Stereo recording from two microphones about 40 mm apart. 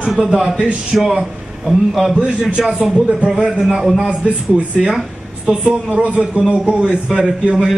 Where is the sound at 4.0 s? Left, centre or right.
Right.